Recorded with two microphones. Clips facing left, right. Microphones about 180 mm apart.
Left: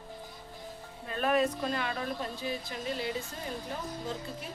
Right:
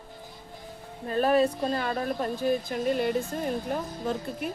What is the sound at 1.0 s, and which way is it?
Speech, 35° right (ahead or behind).